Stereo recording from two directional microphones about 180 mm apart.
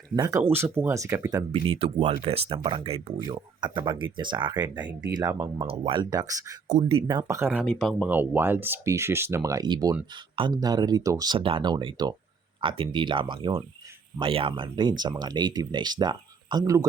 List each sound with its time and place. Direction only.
0.2 s speech: 20° right (ahead or behind)
5.1 s speech: 15° right (ahead or behind)
5.6 s speech: 30° right (ahead or behind)
6.7 s speech: 40° right (ahead or behind)
7.1 s speech: 20° right (ahead or behind)
7.6 s speech: centre (ahead or behind)
8.1 s speech: 10° right (ahead or behind)